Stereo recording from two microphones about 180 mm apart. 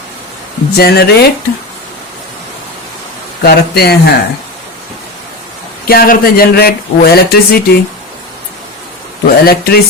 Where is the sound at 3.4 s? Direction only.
60° left (ahead or behind).